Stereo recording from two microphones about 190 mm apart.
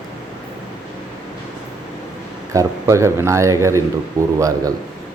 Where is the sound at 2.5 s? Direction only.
15° right (ahead or behind).